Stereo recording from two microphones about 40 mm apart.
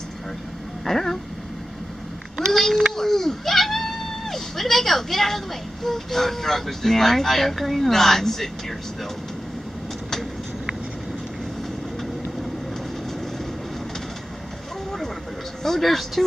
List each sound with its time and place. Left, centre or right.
0.8 s speech: centre
2.4 s a sound: centre
5.9 s speech: centre
15.6 s speech: centre